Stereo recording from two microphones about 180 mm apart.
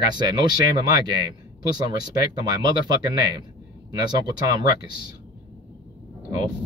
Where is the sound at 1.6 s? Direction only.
20° right (ahead or behind).